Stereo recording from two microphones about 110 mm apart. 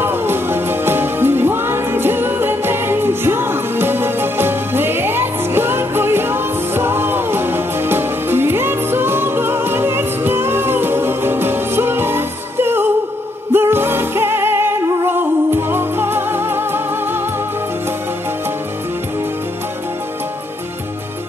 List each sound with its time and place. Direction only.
0.0 s music: 20° right (ahead or behind)